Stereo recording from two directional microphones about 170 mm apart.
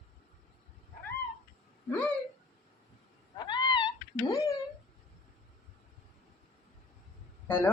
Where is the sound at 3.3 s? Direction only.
30° left (ahead or behind).